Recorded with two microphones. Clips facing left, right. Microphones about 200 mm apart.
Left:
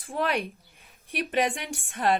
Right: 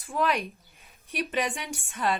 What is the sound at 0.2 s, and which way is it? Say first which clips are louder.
A woman's voice: even; 50° left (ahead or behind).